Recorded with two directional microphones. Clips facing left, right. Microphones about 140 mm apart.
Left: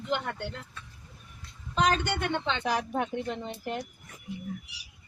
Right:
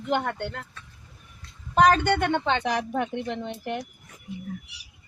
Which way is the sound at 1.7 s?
55° right (ahead or behind).